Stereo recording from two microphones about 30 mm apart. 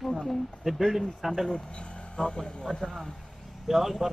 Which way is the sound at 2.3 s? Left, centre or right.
Centre.